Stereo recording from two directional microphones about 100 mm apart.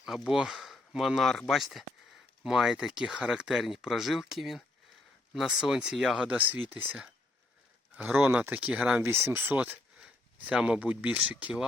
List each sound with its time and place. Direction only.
0.0 s speech: 5° right (ahead or behind)
7.9 s speech: 10° right (ahead or behind)
9.0 s speech: 25° right (ahead or behind)